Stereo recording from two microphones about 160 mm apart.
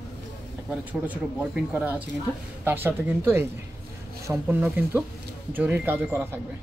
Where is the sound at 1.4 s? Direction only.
10° right (ahead or behind).